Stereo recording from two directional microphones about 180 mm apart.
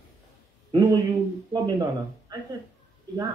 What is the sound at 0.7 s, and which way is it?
Speech, 25° right (ahead or behind).